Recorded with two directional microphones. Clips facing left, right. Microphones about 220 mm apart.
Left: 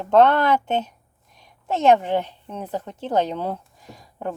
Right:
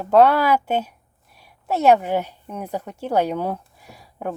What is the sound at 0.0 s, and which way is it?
A woman's voice, 5° right (ahead or behind).